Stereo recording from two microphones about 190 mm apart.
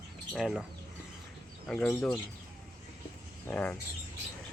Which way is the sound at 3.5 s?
5° left (ahead or behind).